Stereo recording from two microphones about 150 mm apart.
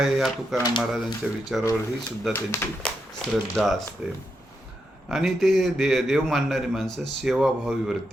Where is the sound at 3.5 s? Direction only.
Centre (ahead or behind).